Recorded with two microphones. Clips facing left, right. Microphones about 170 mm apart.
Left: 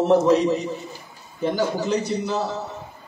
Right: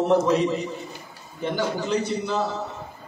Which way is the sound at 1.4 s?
40° left (ahead or behind).